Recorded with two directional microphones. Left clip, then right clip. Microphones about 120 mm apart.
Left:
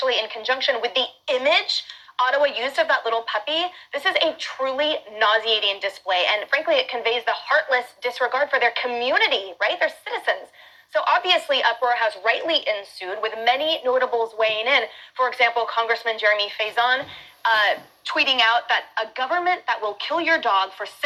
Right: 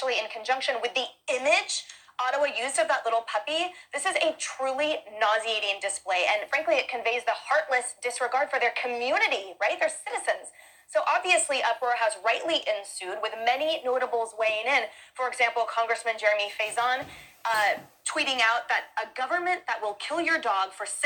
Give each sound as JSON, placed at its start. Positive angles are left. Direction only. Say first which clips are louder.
{"t": 0.0, "sound": "a woman's voice", "louder": "left 6 dB", "side_deg": 35}